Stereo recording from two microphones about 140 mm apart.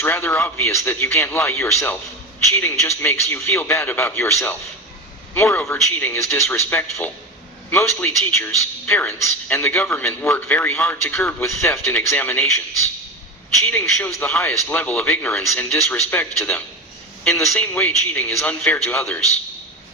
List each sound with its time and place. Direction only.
0.0 s a man's voice: 15° left (ahead or behind)
14.0 s a man's voice: 15° left (ahead or behind)